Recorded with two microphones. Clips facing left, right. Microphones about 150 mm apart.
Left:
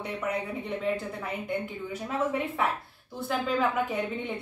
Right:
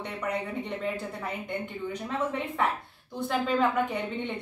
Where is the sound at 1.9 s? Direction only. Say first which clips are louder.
Left 1 dB; 5° left (ahead or behind).